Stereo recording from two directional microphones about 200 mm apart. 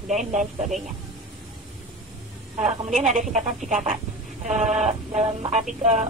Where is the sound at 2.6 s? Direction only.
35° right (ahead or behind).